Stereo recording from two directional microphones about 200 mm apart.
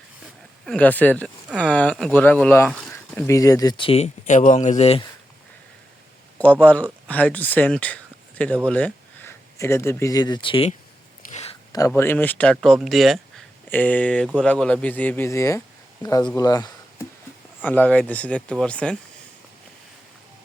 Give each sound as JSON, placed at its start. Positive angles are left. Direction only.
{"t": 0.6, "sound": "speech", "side_deg": 5}
{"t": 6.4, "sound": "speech", "side_deg": 5}
{"t": 11.3, "sound": "a sound", "side_deg": 35}
{"t": 11.9, "sound": "speech", "side_deg": 10}
{"t": 16.4, "sound": "a sound", "side_deg": 20}
{"t": 17.6, "sound": "speech", "side_deg": 10}